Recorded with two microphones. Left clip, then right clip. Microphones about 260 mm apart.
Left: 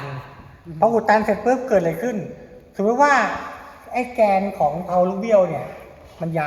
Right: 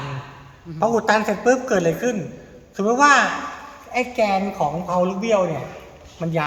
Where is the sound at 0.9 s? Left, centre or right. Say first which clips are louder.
Left 2 dB; right.